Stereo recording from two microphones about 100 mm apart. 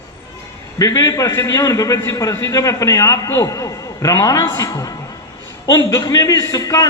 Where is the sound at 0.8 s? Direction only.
35° left (ahead or behind).